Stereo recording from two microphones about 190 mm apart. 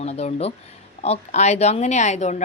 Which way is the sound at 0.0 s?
35° left (ahead or behind).